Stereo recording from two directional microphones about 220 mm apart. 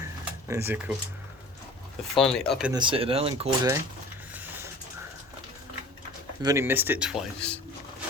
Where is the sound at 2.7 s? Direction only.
25° right (ahead or behind).